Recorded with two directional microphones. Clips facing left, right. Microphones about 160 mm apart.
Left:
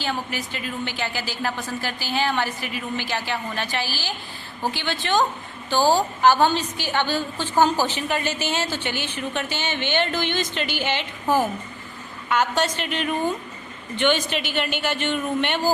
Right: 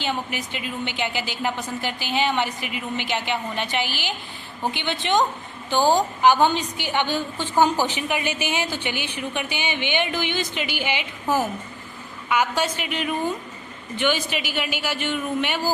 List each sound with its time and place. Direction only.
0.0 s a woman's voice: 20° right (ahead or behind)
12.3 s a woman's voice: 10° right (ahead or behind)